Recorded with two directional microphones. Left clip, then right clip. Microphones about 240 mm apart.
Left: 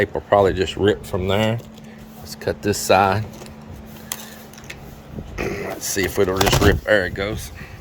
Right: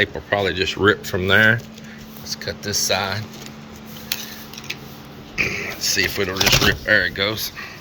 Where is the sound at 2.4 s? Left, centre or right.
Left.